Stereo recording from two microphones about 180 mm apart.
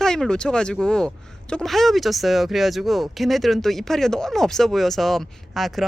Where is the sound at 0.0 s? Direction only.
5° left (ahead or behind).